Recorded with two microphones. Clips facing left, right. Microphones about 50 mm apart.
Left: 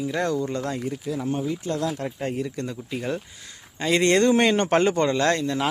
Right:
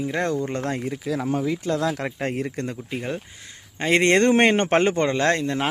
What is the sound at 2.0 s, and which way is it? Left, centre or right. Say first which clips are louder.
Speech: right 1 dB; right.